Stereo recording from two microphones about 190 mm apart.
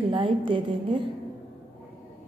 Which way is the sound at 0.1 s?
25° right (ahead or behind).